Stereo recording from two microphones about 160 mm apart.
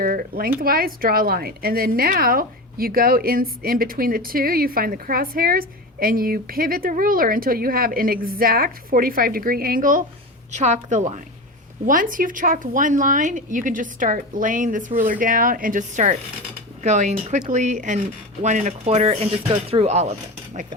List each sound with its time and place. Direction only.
0.0 s a woman's voice: 65° right (ahead or behind)
10.5 s a woman's voice: 50° right (ahead or behind)